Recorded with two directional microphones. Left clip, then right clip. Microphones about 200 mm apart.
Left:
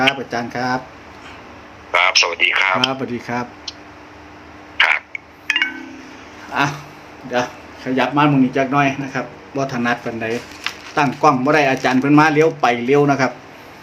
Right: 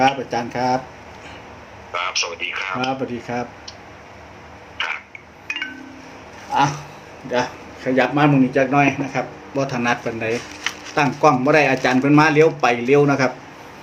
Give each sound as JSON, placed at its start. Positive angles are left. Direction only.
{"t": 0.0, "sound": "speech", "side_deg": 10}
{"t": 1.9, "sound": "speech", "side_deg": 35}
{"t": 3.1, "sound": "speech", "side_deg": 20}
{"t": 4.8, "sound": "a sound", "side_deg": 35}
{"t": 6.5, "sound": "speech", "side_deg": 15}
{"t": 7.9, "sound": "speech", "side_deg": 10}